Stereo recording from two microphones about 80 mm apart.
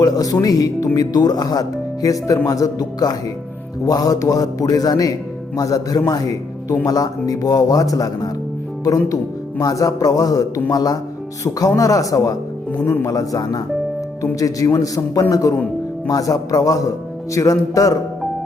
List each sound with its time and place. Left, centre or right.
0.0 s speech: left
12.8 s speech: left
13.1 s speech: left